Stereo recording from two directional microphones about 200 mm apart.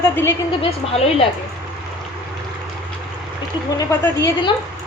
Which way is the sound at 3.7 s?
15° left (ahead or behind).